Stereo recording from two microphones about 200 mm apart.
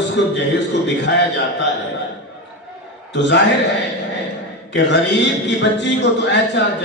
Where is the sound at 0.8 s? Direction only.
60° left (ahead or behind).